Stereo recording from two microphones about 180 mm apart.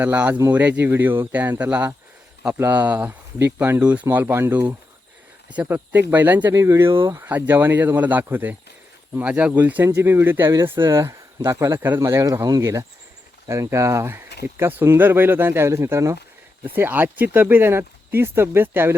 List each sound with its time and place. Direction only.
0.0 s speech: 10° right (ahead or behind)